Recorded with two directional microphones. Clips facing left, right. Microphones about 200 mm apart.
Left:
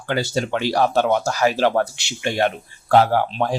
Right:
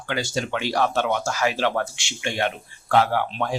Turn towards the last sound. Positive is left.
turn(degrees=35)  # may be behind; listen again after turning